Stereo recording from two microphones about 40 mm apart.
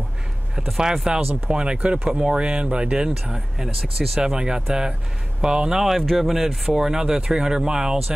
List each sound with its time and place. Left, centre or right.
1.1 s speech: centre
2.0 s speech: centre
2.3 s speech: right
3.3 s speech: centre
4.2 s speech: right
5.9 s speech: centre